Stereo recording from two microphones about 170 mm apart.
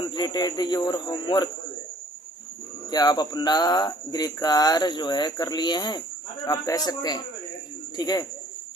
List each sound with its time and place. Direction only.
0.0 s speech: 25° left (ahead or behind)
2.9 s speech: 25° left (ahead or behind)